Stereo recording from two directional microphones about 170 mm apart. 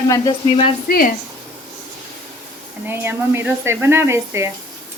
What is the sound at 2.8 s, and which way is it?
Speech, 15° right (ahead or behind).